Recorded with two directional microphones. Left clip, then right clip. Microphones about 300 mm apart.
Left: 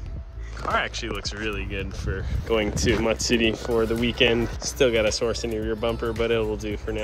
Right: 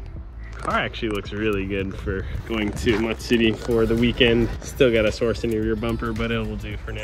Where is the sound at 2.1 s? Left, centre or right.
Right.